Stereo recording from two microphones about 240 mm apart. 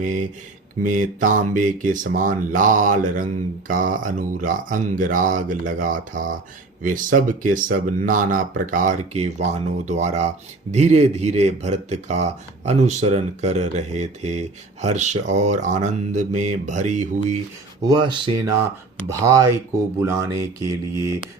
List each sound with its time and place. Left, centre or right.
0.8 s speech: right
17.8 s speech: centre